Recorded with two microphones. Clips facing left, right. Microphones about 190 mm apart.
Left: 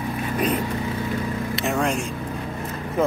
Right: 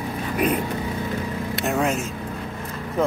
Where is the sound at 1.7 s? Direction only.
5° right (ahead or behind).